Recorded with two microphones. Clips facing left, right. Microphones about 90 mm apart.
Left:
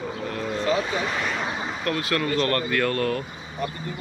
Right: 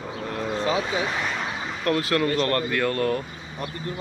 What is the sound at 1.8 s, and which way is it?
Speech, 35° right (ahead or behind).